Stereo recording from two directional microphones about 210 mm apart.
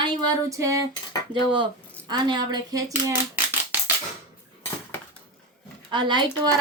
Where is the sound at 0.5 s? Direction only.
15° right (ahead or behind).